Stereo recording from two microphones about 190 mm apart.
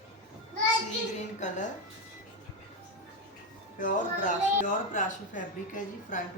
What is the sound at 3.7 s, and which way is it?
A woman's voice, 45° left (ahead or behind).